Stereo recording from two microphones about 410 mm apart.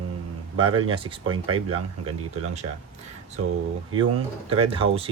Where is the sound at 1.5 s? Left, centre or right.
Right.